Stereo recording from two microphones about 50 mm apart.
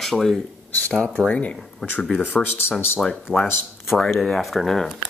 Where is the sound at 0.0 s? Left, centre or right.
Centre.